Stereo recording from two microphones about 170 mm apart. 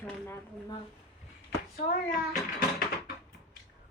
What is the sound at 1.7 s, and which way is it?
Speech, 55° left (ahead or behind).